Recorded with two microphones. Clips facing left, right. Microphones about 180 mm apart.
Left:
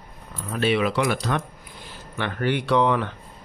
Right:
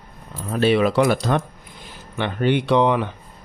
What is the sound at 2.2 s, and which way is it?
Speech, 20° right (ahead or behind).